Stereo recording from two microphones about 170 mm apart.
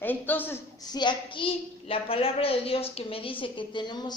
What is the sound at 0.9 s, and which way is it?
A woman's voice, 30° left (ahead or behind).